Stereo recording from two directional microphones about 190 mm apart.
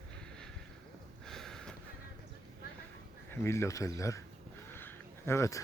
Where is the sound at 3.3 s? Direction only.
15° left (ahead or behind).